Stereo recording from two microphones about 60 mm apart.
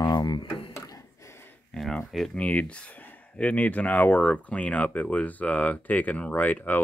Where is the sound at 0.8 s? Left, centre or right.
Left.